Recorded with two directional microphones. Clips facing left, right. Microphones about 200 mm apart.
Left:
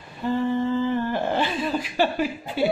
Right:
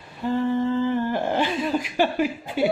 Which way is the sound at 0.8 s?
15° right (ahead or behind).